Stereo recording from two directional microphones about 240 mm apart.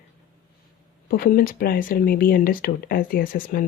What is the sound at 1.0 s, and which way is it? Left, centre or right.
Speech, left.